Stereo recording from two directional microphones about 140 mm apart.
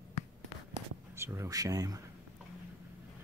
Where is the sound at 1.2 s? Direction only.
20° right (ahead or behind).